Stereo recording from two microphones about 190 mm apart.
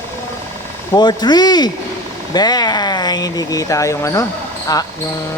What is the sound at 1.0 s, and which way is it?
Speech, 20° left (ahead or behind).